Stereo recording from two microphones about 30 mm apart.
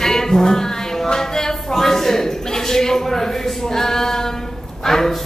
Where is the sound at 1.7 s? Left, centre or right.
Centre.